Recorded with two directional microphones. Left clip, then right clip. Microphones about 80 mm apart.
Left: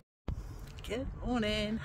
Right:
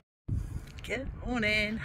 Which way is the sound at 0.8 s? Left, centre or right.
Left.